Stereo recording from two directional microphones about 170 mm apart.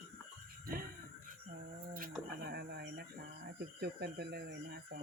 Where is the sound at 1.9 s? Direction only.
60° right (ahead or behind).